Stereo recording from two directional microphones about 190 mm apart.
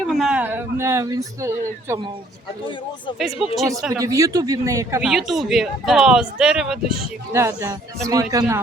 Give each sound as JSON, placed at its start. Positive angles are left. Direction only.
{"t": 0.1, "sound": "speech", "side_deg": 0}
{"t": 3.2, "sound": "speech", "side_deg": 0}
{"t": 3.9, "sound": "speech", "side_deg": -15}
{"t": 5.0, "sound": "speech", "side_deg": 0}
{"t": 7.3, "sound": "speech", "side_deg": -15}